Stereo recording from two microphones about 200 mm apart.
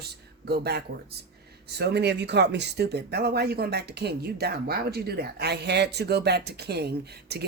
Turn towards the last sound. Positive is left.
turn(degrees=-55)  # may be behind; listen again after turning